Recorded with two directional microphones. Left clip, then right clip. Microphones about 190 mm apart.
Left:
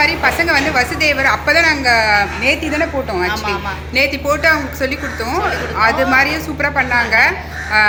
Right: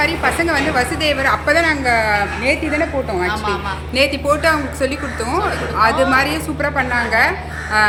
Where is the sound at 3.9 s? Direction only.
10° right (ahead or behind).